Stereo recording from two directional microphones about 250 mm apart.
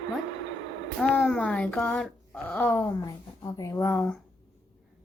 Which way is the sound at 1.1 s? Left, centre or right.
Centre.